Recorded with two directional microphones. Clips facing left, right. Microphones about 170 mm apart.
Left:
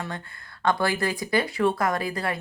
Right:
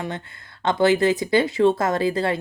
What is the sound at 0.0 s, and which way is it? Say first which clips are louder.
Speech: right 4 dB; 20° right (ahead or behind).